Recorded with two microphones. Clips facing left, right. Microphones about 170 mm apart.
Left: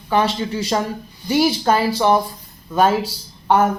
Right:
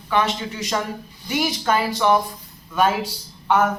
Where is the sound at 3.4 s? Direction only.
35° left (ahead or behind).